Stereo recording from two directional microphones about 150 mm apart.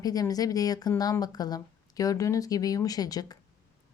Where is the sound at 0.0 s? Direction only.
25° left (ahead or behind).